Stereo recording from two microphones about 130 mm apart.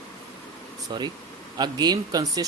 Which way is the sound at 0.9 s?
35° right (ahead or behind).